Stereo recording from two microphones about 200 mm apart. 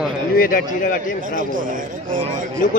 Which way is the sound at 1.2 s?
40° right (ahead or behind).